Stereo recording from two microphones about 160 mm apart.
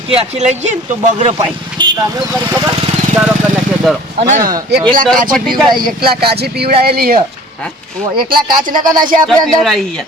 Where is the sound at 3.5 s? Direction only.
Centre (ahead or behind).